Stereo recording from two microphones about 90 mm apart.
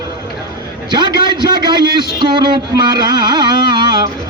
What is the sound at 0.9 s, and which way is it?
A man's voice, 55° right (ahead or behind).